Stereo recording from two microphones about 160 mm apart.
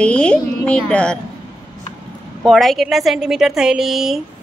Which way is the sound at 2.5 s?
Centre (ahead or behind).